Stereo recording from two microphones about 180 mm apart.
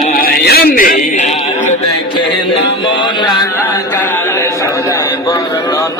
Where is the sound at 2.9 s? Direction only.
25° left (ahead or behind).